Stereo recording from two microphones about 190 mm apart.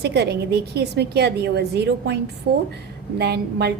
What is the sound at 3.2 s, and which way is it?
Speech, 60° right (ahead or behind).